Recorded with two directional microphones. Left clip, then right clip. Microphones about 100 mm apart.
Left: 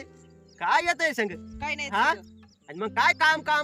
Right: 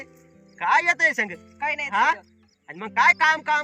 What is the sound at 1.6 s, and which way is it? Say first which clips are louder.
Speech: right 5 dB; 5° left (ahead or behind).